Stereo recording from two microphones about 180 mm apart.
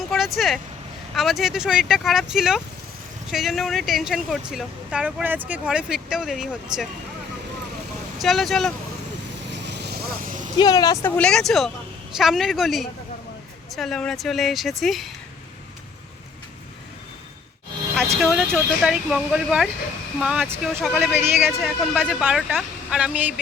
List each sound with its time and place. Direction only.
0.1 s vehicle: centre (ahead or behind)
1.1 s speech: centre (ahead or behind)
8.2 s speech: centre (ahead or behind)
9.5 s vehicle: 75° right (ahead or behind); by 10.5 s 45° right (ahead or behind)
10.6 s speech: 25° left (ahead or behind); by 15.1 s centre (ahead or behind)
18.2 s speech: centre (ahead or behind)
21.1 s speech: 10° right (ahead or behind)
21.6 s speech: centre (ahead or behind)